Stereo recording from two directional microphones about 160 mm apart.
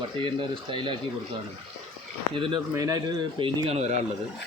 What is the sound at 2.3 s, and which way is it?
Speech, 30° right (ahead or behind).